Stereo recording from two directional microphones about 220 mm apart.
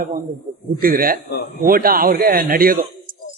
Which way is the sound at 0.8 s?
40° right (ahead or behind).